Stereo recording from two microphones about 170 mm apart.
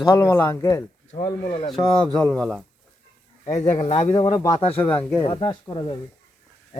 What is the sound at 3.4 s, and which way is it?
Speech, 40° left (ahead or behind).